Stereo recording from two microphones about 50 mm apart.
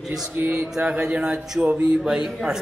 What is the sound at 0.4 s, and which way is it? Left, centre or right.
Music, right.